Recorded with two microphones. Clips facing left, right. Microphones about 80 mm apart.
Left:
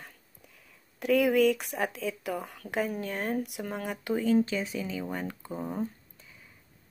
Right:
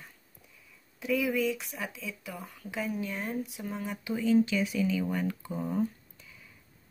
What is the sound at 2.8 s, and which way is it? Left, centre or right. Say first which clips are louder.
Speech: left 3 dB; left.